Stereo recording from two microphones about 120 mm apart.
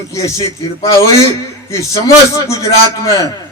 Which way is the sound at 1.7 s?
25° left (ahead or behind).